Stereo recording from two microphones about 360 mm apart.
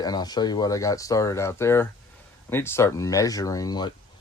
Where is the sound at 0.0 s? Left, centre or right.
Centre.